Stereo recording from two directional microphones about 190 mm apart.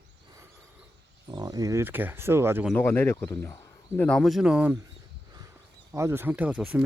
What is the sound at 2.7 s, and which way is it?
Speech, 10° left (ahead or behind).